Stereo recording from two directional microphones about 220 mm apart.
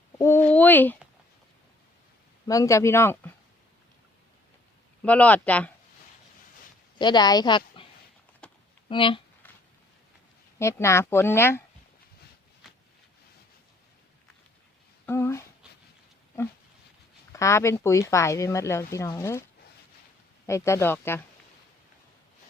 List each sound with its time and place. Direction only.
0.2 s a sound: 10° left (ahead or behind)
2.5 s speech: 15° left (ahead or behind)
5.0 s speech: 5° left (ahead or behind)
7.0 s speech: 20° left (ahead or behind)
8.4 s a sound: 5° left (ahead or behind)
8.9 s speech: 25° left (ahead or behind)
10.6 s speech: 10° left (ahead or behind)
15.0 s a sound: 10° left (ahead or behind)
17.3 s speech: 15° left (ahead or behind)
20.5 s speech: 10° left (ahead or behind)